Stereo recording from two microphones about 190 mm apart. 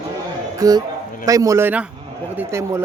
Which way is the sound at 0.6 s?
20° right (ahead or behind).